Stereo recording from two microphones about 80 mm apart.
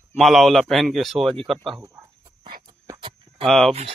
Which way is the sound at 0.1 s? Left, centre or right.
Centre.